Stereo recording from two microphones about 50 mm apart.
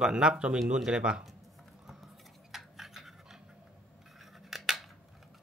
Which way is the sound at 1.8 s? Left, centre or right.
Centre.